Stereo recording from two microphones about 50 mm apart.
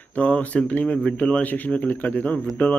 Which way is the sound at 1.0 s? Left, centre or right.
Left.